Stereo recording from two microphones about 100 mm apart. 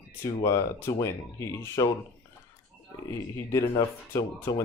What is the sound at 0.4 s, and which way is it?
Speech, 30° left (ahead or behind).